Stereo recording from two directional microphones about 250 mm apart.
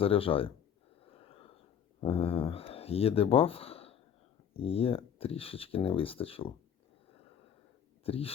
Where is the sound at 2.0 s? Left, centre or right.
Left.